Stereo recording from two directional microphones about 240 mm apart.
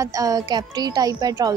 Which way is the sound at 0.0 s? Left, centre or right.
Centre.